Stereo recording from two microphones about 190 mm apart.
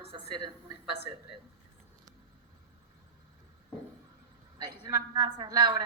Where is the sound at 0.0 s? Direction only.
30° right (ahead or behind).